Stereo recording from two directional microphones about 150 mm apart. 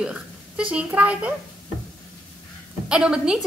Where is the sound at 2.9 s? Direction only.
5° right (ahead or behind).